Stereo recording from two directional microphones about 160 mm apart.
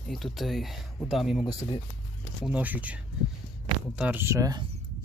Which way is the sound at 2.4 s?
10° right (ahead or behind).